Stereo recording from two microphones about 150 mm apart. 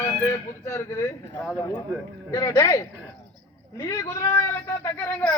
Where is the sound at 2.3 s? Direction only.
15° left (ahead or behind).